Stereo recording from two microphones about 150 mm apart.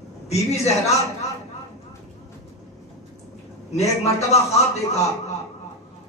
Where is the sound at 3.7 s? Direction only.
45° left (ahead or behind).